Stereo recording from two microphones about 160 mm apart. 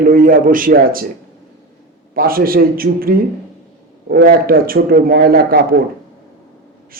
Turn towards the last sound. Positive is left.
turn(degrees=-70)  # may be behind; listen again after turning